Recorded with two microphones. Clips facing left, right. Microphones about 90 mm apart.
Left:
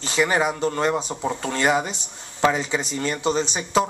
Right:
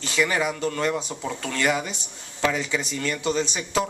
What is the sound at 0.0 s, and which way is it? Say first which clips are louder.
Speech: left 3 dB; 25° left (ahead or behind).